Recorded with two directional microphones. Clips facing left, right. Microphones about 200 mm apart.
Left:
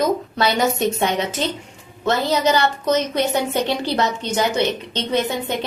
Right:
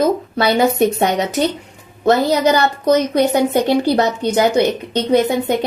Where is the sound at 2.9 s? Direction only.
15° right (ahead or behind).